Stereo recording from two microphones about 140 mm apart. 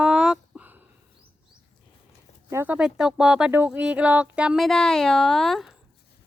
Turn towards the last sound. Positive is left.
turn(degrees=0)  # may be behind; listen again after turning